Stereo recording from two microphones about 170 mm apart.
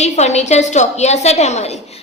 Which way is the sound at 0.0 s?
40° left (ahead or behind).